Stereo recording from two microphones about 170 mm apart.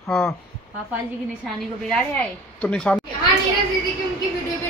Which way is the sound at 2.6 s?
5° left (ahead or behind).